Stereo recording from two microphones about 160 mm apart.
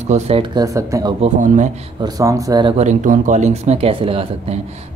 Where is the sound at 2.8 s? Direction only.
50° right (ahead or behind).